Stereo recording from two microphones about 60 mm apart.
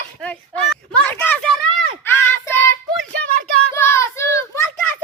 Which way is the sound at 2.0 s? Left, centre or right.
Left.